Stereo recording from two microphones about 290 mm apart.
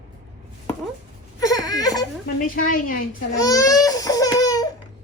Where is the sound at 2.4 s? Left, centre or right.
Left.